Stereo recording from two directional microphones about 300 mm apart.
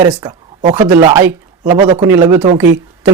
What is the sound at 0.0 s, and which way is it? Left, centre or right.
Speech, centre.